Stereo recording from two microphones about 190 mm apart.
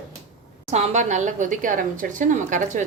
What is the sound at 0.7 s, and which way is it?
A woman's voice, 40° right (ahead or behind).